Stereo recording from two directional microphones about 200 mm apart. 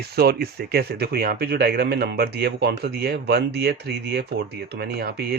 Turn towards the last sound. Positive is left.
turn(degrees=-50)  # may be behind; listen again after turning